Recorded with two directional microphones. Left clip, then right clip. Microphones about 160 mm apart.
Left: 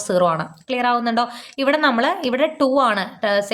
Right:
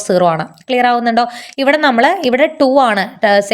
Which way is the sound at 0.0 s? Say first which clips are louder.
Right 6 dB; 30° right (ahead or behind).